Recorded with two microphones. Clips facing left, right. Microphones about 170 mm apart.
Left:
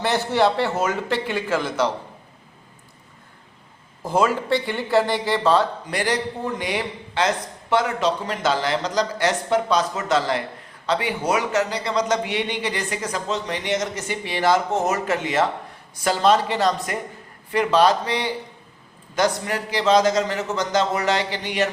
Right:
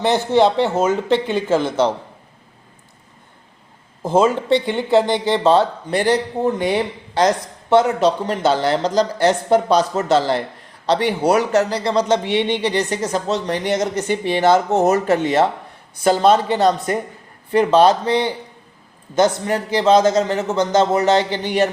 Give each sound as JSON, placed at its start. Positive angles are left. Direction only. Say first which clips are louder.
{"t": 0.0, "sound": "speech", "louder": "right 5 dB", "side_deg": -20}
{"t": 4.0, "sound": "a man's voice", "louder": "right 5 dB", "side_deg": -25}
{"t": 13.2, "sound": "a man's voice", "louder": "right 5 dB", "side_deg": -40}
{"t": 16.6, "sound": "a man's voice", "louder": "right 5 dB", "side_deg": -30}